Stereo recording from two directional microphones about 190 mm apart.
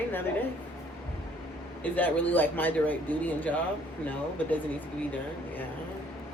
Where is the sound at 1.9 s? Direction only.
10° left (ahead or behind).